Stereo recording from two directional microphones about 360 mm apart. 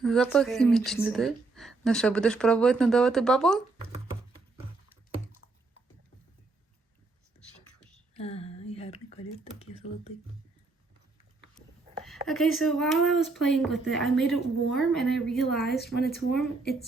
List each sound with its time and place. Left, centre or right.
0.0 s speech: centre
8.1 s speech: centre
12.0 s speech: centre
15.6 s a woman's voice: left